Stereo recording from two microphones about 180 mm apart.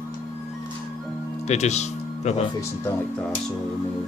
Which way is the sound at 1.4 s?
40° left (ahead or behind).